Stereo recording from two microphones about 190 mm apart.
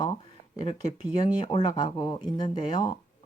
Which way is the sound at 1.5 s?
20° left (ahead or behind).